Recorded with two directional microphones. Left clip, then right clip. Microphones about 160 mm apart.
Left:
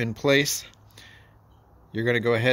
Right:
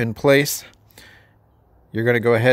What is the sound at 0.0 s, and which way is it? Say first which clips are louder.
Speech: right 6 dB; 45° right (ahead or behind).